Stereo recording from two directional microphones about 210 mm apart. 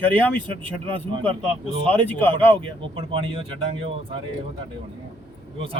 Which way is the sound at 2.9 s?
25° right (ahead or behind).